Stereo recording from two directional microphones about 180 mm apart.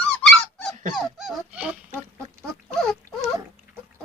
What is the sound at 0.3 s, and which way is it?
Dog, centre (ahead or behind).